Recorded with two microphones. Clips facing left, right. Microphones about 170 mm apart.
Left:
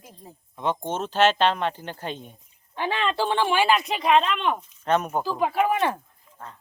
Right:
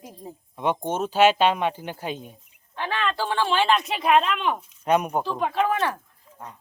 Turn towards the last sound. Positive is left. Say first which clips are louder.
# left 1 dB
turn(degrees=15)  # may be behind; listen again after turning